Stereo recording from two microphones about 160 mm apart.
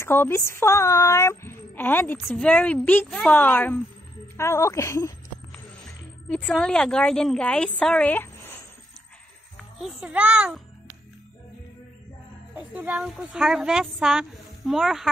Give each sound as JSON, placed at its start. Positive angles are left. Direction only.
{"t": 0.0, "sound": "a woman's voice", "side_deg": 15}
{"t": 6.2, "sound": "a woman's voice", "side_deg": 10}
{"t": 9.8, "sound": "a woman's voice", "side_deg": -5}
{"t": 12.7, "sound": "a woman's voice", "side_deg": -10}